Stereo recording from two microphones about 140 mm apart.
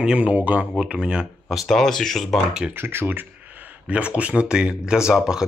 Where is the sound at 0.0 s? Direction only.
10° right (ahead or behind).